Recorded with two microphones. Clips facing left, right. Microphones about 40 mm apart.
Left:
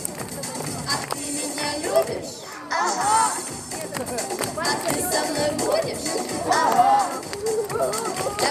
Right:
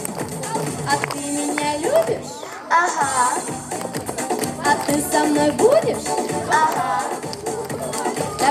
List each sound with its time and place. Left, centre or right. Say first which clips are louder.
0.5 s music: right 7 dB; right
4.6 s music: right 6 dB; right